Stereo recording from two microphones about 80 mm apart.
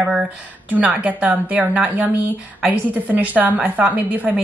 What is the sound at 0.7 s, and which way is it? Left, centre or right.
Speech, centre.